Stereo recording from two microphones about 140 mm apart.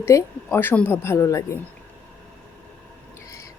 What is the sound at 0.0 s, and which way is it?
A woman's voice, 20° left (ahead or behind).